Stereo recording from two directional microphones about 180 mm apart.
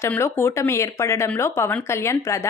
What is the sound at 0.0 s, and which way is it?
Speech, 15° left (ahead or behind).